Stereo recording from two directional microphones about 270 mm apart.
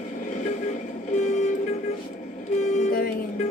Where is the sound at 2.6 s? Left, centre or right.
Left.